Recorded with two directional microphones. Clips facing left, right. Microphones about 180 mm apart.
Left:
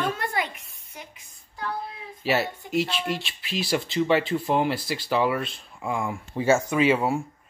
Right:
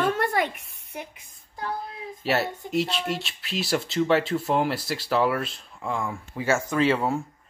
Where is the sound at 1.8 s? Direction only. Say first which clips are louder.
Left 2 dB; centre (ahead or behind).